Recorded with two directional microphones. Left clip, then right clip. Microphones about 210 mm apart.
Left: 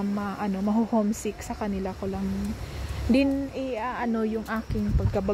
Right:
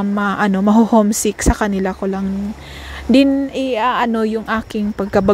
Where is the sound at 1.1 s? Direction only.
35° right (ahead or behind).